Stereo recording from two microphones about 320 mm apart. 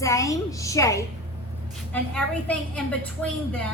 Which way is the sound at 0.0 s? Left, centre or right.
Centre.